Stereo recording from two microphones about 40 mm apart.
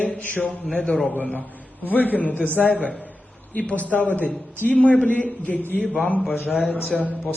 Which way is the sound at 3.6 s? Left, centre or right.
Left.